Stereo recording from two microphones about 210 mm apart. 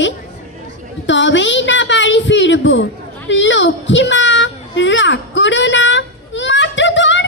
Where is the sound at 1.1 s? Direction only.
60° left (ahead or behind).